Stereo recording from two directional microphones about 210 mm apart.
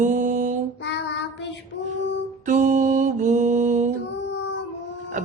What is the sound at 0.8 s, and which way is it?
Child singing, 55° left (ahead or behind).